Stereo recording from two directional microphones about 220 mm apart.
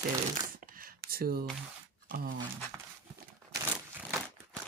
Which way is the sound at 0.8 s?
40° right (ahead or behind).